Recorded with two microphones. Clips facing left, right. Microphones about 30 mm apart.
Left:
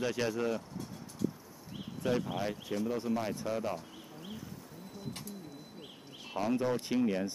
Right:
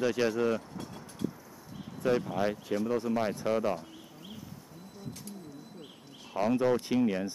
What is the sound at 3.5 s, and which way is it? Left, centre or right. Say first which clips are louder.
Speech: right 7 dB; right.